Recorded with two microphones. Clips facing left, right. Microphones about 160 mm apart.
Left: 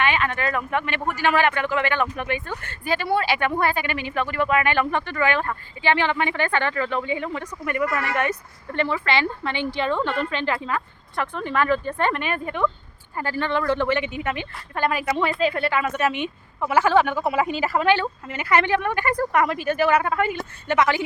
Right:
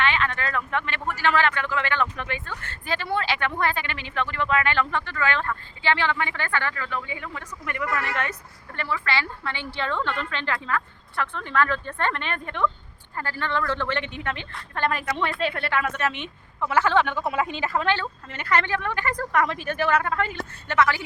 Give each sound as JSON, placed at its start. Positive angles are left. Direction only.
{"t": 0.0, "sound": "speech", "side_deg": 15}